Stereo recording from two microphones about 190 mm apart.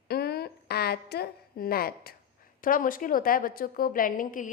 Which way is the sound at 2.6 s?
45° left (ahead or behind).